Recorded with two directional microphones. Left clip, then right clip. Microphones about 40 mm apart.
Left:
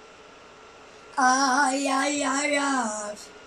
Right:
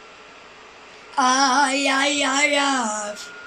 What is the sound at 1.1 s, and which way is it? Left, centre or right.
Child singing, right.